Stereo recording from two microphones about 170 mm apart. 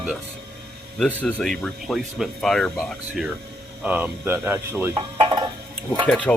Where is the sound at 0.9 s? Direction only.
5° left (ahead or behind); by 4.9 s 15° right (ahead or behind).